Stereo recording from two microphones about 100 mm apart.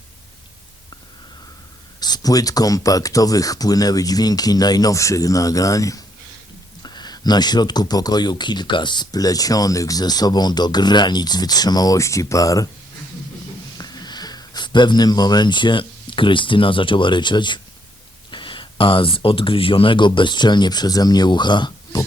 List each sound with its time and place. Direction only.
2.0 s speech: 40° left (ahead or behind)
6.8 s speech: 45° left (ahead or behind)
13.7 s speech: 45° left (ahead or behind)